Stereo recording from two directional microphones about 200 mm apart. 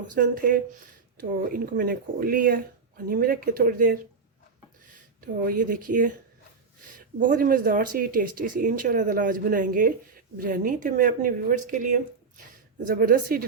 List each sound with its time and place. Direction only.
0.1 s speech: 45° right (ahead or behind)
5.2 s a woman's voice: 45° right (ahead or behind)